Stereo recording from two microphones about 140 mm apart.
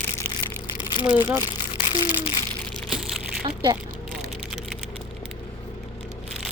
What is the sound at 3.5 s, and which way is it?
Speech, 30° right (ahead or behind).